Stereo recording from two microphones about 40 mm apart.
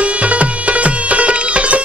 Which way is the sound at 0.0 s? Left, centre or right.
Right.